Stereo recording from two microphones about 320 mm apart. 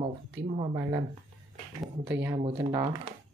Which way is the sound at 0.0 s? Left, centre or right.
Centre.